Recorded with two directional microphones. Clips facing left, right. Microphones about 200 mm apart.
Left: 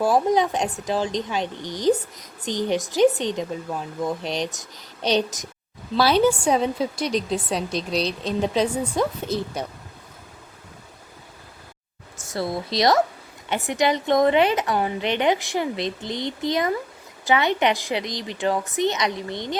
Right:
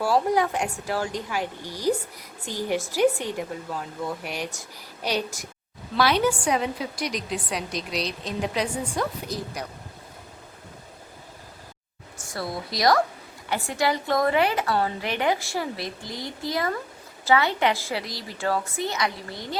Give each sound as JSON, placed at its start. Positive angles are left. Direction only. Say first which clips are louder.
{"t": 0.0, "sound": "speech", "louder": "left 3 dB", "side_deg": 20}
{"t": 12.3, "sound": "speech", "louder": "left 5 dB", "side_deg": 25}